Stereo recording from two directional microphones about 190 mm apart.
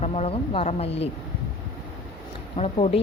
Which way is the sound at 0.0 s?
30° left (ahead or behind).